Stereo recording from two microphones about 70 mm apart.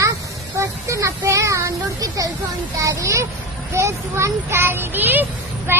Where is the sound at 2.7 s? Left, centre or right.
Right.